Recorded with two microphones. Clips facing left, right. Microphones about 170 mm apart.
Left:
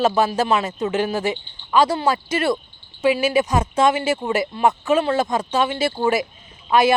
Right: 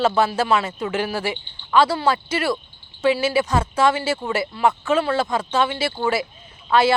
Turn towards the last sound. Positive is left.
turn(degrees=15)  # may be behind; listen again after turning